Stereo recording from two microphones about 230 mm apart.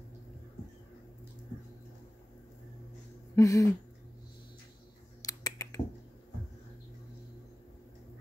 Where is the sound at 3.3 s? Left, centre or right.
Centre.